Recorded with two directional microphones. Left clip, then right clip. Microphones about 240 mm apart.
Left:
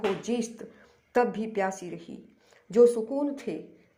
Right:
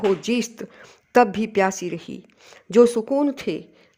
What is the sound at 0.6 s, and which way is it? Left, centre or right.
Speech, right.